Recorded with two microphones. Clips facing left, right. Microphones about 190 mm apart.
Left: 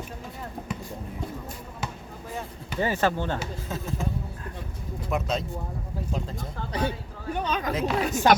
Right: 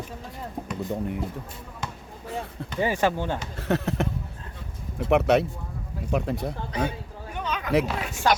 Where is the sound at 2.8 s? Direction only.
15° right (ahead or behind).